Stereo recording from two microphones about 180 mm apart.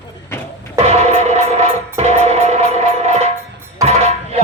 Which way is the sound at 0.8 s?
35° right (ahead or behind).